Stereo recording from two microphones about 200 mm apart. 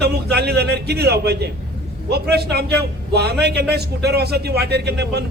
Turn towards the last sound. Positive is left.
turn(degrees=-55)  # may be behind; listen again after turning